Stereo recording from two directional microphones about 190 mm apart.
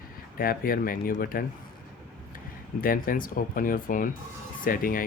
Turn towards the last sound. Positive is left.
turn(degrees=50)  # may be behind; listen again after turning